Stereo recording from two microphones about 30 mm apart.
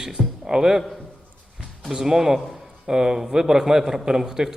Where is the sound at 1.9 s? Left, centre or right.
Centre.